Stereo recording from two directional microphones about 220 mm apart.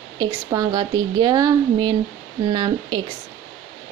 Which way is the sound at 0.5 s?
15° right (ahead or behind).